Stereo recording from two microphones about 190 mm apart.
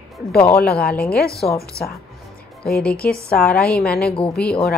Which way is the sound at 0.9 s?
5° left (ahead or behind).